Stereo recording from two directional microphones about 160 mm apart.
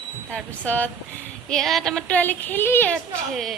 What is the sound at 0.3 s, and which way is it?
Speech, 10° left (ahead or behind).